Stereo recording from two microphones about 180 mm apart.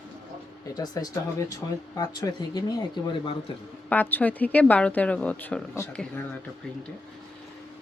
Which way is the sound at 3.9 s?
10° left (ahead or behind).